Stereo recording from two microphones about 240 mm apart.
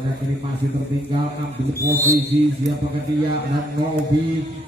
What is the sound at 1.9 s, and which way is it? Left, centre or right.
Speech, centre.